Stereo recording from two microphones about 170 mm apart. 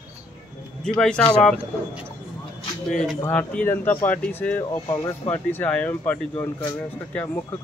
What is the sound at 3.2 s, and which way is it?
Speech, 10° left (ahead or behind).